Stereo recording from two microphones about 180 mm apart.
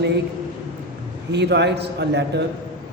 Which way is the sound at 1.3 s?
70° right (ahead or behind).